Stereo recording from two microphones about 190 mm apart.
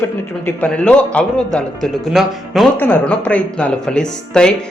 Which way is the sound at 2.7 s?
10° left (ahead or behind).